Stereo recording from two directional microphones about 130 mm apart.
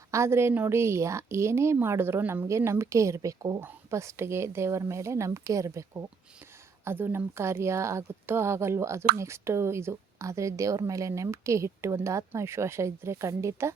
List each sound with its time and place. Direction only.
0.1 s speech: 20° right (ahead or behind)
3.6 s speech: 20° right (ahead or behind)